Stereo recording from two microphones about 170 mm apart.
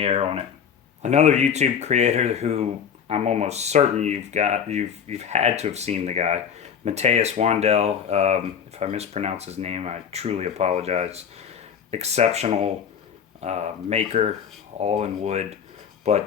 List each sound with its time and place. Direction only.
0.0 s speech: 35° right (ahead or behind)